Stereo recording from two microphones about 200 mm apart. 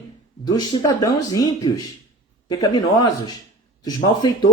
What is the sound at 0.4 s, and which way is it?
Speech, 20° left (ahead or behind).